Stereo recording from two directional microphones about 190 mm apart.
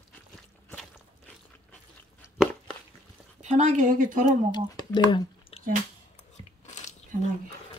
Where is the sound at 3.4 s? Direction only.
40° right (ahead or behind).